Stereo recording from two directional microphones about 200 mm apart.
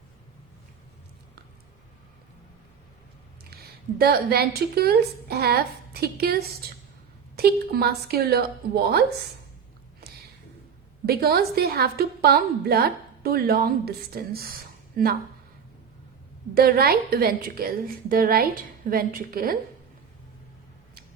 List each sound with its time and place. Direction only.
3.5 s a woman's voice: 50° right (ahead or behind)
11.0 s a woman's voice: 50° right (ahead or behind)
16.6 s a woman's voice: 50° right (ahead or behind)